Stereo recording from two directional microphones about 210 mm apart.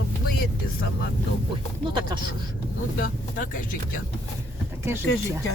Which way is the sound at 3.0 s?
40° left (ahead or behind).